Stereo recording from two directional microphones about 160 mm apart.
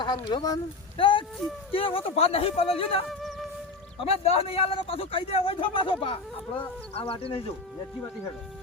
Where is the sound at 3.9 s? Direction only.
35° left (ahead or behind).